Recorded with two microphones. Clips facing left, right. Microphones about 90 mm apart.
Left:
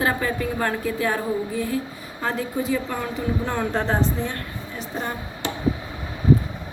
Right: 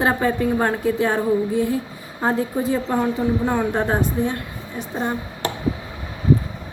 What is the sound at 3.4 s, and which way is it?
A woman's voice, 15° right (ahead or behind).